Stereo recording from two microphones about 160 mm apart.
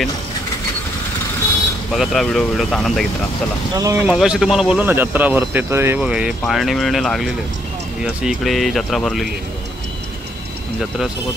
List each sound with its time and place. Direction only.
2.0 s speech: centre (ahead or behind)
3.7 s speech: 20° right (ahead or behind)
4.0 s speech: 5° right (ahead or behind)